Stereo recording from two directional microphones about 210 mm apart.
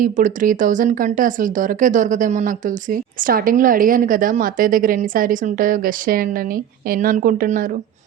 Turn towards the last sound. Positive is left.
turn(degrees=-40)  # may be behind; listen again after turning